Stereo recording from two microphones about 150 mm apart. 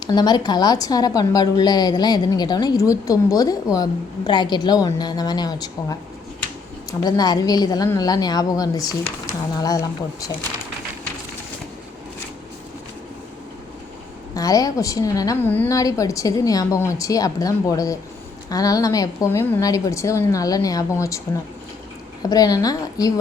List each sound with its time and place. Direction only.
0.1 s a woman's voice: 30° left (ahead or behind)
7.0 s a woman's voice: 25° left (ahead or behind)
14.3 s a woman's voice: 25° left (ahead or behind)
15.4 s a woman's voice: 10° left (ahead or behind)
15.7 s a woman's voice: 20° left (ahead or behind)
22.2 s a woman's voice: 25° left (ahead or behind)